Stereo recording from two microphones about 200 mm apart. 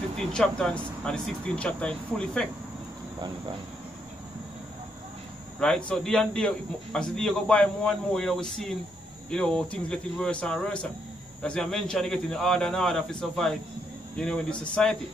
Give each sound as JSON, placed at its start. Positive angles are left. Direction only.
{"t": 0.3, "sound": "speech", "side_deg": 5}
{"t": 3.2, "sound": "cricket", "side_deg": -20}
{"t": 5.6, "sound": "speech", "side_deg": 5}